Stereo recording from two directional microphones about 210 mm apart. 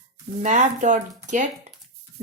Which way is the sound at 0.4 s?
35° right (ahead or behind).